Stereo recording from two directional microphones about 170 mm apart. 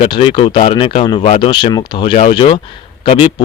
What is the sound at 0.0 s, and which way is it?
Speech, 35° left (ahead or behind).